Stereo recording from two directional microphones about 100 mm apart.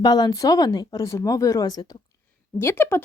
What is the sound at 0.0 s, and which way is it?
Speech, 45° left (ahead or behind).